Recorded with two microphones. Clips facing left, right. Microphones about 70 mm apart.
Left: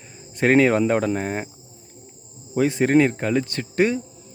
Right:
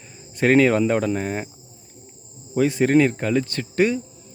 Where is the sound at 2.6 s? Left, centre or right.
Left.